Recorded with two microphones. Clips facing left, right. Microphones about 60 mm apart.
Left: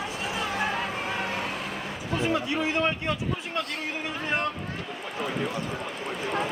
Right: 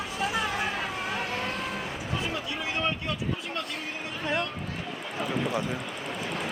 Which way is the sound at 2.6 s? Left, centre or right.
Left.